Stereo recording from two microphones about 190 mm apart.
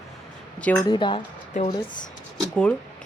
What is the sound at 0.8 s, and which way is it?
Speech, 25° left (ahead or behind).